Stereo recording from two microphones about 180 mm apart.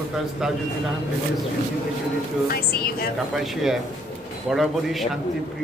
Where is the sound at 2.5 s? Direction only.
60° left (ahead or behind).